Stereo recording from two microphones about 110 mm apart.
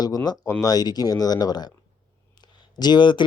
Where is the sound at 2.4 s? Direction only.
40° left (ahead or behind).